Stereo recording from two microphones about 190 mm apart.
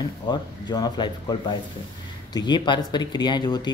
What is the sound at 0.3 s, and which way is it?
Speech, 20° left (ahead or behind).